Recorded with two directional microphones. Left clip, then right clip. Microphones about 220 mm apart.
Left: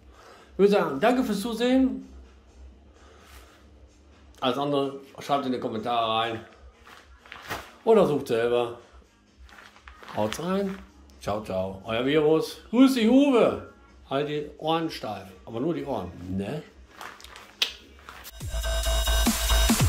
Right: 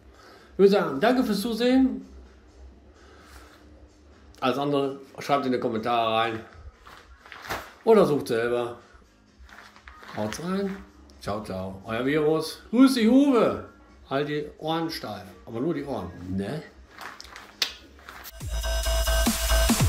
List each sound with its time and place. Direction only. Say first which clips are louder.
0.3 s a man's voice: right 2 dB; centre (ahead or behind)
4.4 s speech: right 1 dB; 5° right (ahead or behind)
7.8 s speech: right 1 dB; centre (ahead or behind)
9.8 s a sound: left 3 dB; 25° left (ahead or behind)
11.1 s speech: left 3 dB; 5° left (ahead or behind)
17.6 s a sound: left 1 dB; 5° left (ahead or behind)
18.4 s music: even; centre (ahead or behind)